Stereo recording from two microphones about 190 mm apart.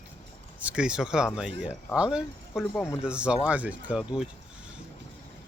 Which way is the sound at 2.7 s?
15° left (ahead or behind).